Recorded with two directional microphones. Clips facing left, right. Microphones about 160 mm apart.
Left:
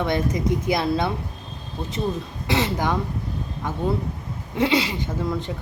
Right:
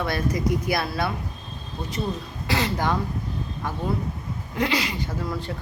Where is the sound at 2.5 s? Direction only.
20° left (ahead or behind).